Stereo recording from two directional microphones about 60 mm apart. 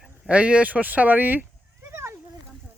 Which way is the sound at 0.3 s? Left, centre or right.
Right.